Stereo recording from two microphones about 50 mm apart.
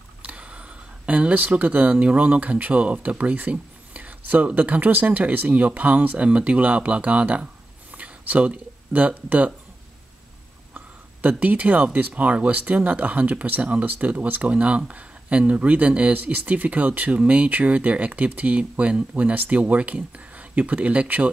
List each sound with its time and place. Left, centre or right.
0.2 s speech: right
11.2 s speech: right
14.5 s speech: right